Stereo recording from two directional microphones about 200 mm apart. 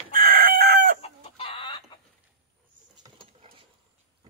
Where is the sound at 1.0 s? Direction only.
30° left (ahead or behind).